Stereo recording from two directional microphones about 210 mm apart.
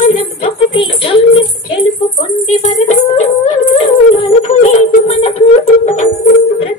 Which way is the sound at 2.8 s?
35° left (ahead or behind).